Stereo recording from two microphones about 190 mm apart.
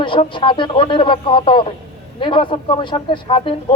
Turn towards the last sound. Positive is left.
turn(degrees=30)  # may be behind; listen again after turning